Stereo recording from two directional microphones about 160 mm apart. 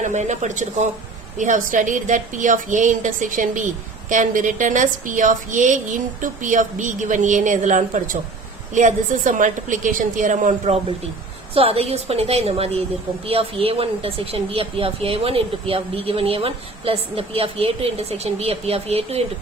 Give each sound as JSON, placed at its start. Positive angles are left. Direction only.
{"t": 0.0, "sound": "a woman's voice", "side_deg": -50}
{"t": 11.5, "sound": "speech", "side_deg": -35}